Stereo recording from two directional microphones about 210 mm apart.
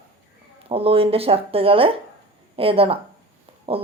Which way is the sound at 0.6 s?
25° right (ahead or behind).